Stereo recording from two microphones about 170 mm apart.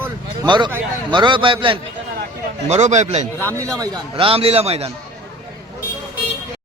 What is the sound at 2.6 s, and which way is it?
Speech, 40° right (ahead or behind).